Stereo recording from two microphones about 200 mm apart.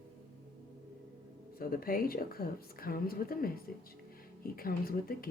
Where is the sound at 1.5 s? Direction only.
45° left (ahead or behind).